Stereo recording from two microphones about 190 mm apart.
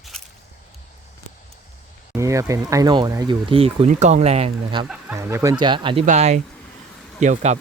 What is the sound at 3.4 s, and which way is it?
Speech, 30° right (ahead or behind).